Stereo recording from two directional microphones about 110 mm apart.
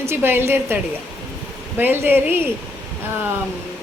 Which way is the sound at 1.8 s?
20° right (ahead or behind).